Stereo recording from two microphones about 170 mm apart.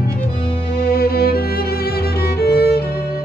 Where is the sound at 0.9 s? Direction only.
65° left (ahead or behind).